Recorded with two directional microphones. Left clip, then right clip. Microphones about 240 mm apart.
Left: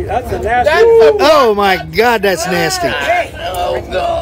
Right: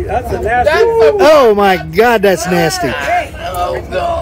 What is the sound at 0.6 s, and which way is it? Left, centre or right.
Speech, left.